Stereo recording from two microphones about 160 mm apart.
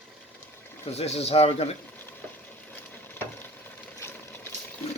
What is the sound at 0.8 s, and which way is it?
Speech, 40° left (ahead or behind).